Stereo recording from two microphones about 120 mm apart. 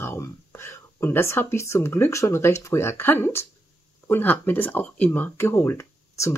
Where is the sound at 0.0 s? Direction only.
20° left (ahead or behind).